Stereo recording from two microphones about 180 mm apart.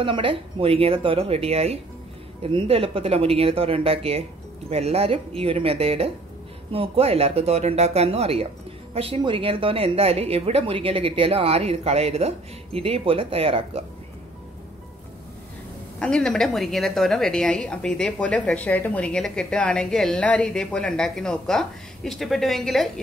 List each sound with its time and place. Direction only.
0.0 s a woman's voice: 30° right (ahead or behind)
16.0 s a woman's voice: 5° left (ahead or behind)